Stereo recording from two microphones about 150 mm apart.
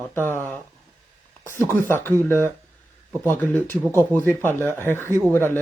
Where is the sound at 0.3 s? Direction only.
15° left (ahead or behind).